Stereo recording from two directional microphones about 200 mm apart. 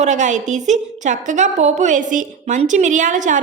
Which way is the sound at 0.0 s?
35° right (ahead or behind).